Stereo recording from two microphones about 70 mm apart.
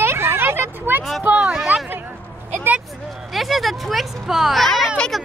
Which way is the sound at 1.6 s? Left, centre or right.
Right.